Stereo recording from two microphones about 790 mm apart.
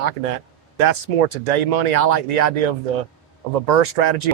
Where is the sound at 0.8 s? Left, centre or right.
Right.